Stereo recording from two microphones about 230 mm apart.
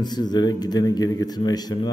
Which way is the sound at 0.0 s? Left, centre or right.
Centre.